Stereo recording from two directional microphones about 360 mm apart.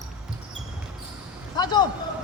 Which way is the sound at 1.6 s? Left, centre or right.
Centre.